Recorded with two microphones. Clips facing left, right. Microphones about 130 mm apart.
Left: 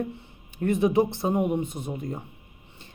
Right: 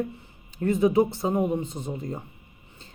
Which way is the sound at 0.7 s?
25° left (ahead or behind).